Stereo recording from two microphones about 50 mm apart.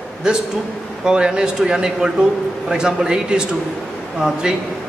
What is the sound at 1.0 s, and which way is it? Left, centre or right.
A man's voice, centre.